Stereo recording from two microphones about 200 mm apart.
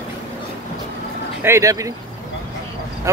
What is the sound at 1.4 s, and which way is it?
Speech, 15° right (ahead or behind).